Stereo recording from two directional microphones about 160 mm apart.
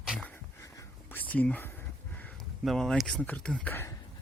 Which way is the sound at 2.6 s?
Centre (ahead or behind).